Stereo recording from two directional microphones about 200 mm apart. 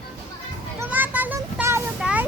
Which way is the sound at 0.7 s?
10° right (ahead or behind).